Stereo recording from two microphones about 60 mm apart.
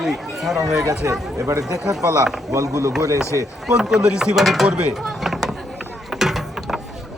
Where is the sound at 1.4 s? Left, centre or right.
Right.